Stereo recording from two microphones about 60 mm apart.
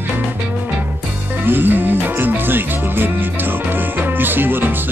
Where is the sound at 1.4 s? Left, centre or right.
Right.